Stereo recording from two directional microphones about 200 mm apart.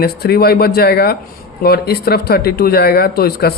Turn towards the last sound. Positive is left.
turn(degrees=50)  # may be behind; listen again after turning